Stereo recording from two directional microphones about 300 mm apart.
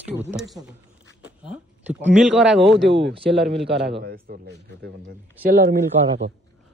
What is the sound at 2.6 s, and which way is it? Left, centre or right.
A man's voice, right.